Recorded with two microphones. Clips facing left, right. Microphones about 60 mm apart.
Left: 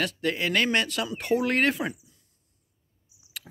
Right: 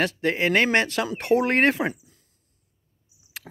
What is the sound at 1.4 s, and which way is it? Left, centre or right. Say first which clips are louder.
Speech: right 4 dB; right.